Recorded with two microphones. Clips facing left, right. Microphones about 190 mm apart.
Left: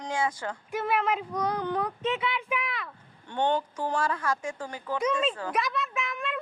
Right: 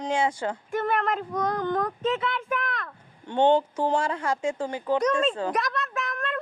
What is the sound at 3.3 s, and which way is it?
Speech, 20° right (ahead or behind).